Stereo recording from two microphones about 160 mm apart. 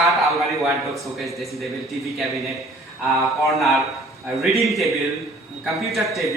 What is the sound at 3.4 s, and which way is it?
Speech, centre (ahead or behind).